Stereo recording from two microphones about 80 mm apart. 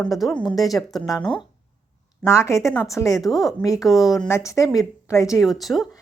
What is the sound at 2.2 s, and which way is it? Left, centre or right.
Speech, left.